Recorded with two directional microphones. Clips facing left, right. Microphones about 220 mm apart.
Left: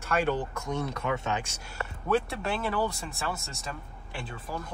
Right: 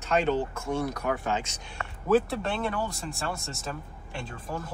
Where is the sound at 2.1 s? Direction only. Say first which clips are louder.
Right 4 dB; centre (ahead or behind).